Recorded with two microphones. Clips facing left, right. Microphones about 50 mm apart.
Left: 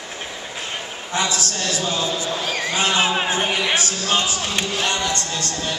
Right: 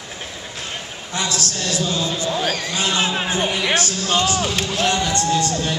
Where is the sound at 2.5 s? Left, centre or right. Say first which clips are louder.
Left 2 dB; left.